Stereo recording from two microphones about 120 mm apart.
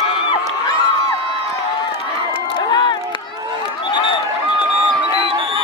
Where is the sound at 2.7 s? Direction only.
40° left (ahead or behind).